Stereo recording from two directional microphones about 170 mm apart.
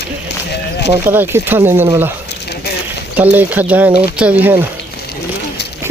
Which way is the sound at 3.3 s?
10° right (ahead or behind).